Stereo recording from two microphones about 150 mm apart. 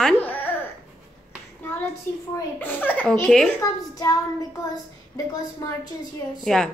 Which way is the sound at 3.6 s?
20° left (ahead or behind).